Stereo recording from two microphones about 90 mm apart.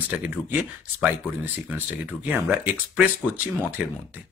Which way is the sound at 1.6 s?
20° right (ahead or behind).